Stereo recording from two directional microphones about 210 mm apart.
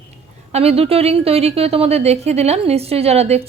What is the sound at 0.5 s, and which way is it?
Speech, 30° right (ahead or behind).